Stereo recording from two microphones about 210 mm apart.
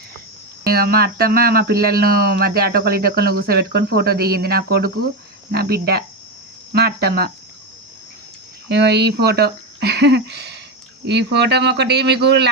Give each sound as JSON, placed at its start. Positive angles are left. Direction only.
{"t": 0.6, "sound": "speech", "side_deg": -45}
{"t": 8.7, "sound": "speech", "side_deg": -50}